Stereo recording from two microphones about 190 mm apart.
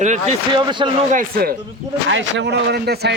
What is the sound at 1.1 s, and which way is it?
Speech, 50° right (ahead or behind).